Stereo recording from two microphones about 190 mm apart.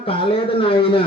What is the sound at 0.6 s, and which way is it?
Speech, 30° left (ahead or behind).